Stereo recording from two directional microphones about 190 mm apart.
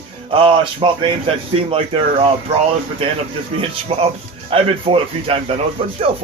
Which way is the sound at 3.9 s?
30° right (ahead or behind).